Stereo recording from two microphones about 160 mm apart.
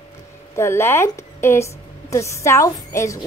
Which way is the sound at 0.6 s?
15° left (ahead or behind).